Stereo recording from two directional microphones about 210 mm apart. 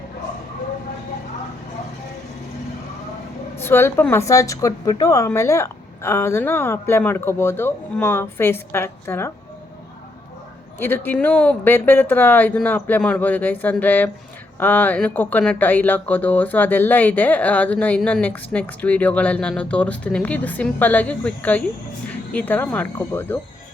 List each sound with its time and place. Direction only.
3.6 s speech: 10° left (ahead or behind)
10.8 s speech: 10° left (ahead or behind)